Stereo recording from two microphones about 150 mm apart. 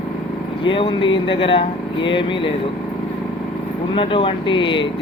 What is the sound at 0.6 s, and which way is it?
Speech, 35° left (ahead or behind).